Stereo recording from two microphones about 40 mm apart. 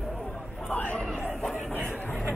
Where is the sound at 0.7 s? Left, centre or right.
Left.